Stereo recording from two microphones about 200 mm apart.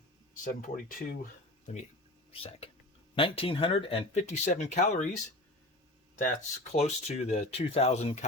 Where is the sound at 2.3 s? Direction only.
30° left (ahead or behind).